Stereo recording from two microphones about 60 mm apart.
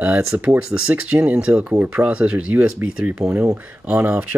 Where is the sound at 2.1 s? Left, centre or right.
Centre.